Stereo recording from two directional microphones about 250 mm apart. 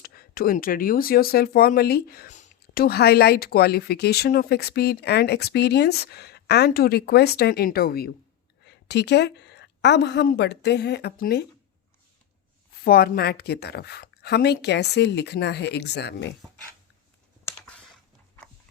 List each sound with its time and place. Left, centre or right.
0.0 s a woman's voice: left
12.8 s speech: left
17.4 s computer keyboard: centre